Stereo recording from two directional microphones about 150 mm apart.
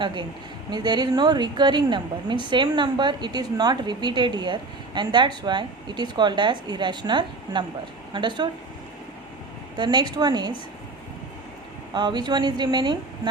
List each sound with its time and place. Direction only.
0.0 s a woman's voice: 30° right (ahead or behind)
9.7 s a woman's voice: 30° right (ahead or behind)
11.9 s a woman's voice: 30° right (ahead or behind)